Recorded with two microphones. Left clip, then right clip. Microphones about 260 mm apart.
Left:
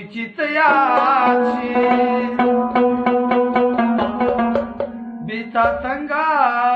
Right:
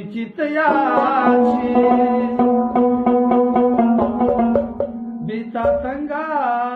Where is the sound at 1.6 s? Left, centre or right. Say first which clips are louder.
Right 1 dB; left.